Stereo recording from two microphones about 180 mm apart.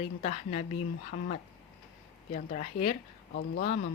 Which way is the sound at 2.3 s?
45° left (ahead or behind).